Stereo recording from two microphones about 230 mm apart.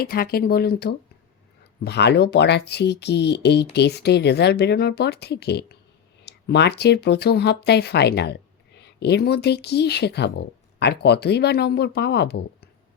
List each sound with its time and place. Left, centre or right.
0.0 s speech: left